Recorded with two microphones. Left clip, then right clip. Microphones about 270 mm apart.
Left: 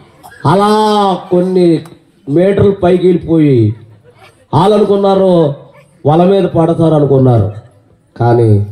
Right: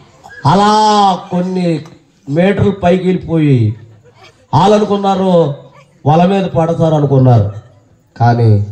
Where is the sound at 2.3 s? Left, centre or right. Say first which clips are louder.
Left 4 dB; left.